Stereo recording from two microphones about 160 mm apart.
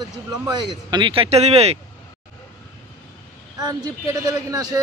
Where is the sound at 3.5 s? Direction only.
25° right (ahead or behind).